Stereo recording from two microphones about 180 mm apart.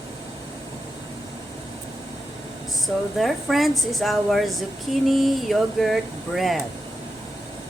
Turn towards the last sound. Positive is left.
turn(degrees=0)  # may be behind; listen again after turning